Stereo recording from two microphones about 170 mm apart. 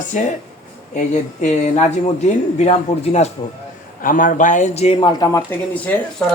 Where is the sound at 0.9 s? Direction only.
45° left (ahead or behind).